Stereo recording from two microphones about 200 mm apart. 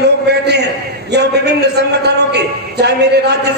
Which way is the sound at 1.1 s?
55° right (ahead or behind).